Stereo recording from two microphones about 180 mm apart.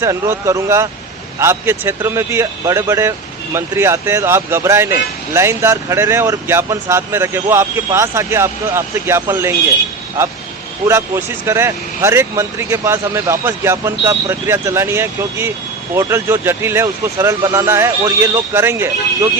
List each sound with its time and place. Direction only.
0.0 s speech: 15° right (ahead or behind)